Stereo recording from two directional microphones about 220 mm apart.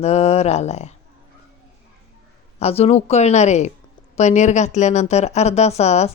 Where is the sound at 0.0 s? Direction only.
30° left (ahead or behind).